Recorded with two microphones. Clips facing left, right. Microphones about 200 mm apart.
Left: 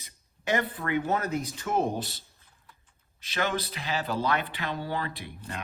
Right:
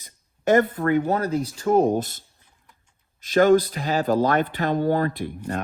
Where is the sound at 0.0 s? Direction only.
45° right (ahead or behind).